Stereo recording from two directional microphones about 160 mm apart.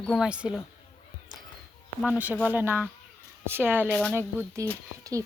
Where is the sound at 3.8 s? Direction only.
5° left (ahead or behind).